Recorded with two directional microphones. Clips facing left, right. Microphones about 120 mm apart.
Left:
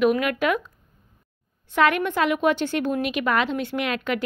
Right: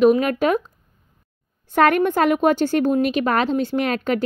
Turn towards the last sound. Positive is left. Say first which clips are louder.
# right 5 dB
turn(degrees=-40)  # may be behind; listen again after turning